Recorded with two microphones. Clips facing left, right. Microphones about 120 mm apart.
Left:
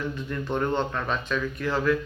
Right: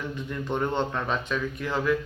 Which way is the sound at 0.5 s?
20° right (ahead or behind).